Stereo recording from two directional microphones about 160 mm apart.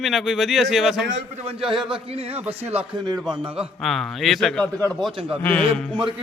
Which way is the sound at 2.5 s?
40° right (ahead or behind).